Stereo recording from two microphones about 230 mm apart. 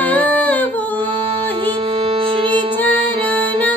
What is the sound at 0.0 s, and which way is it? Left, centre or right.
Humming, centre.